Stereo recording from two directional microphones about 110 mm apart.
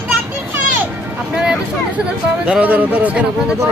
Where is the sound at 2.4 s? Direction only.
10° right (ahead or behind).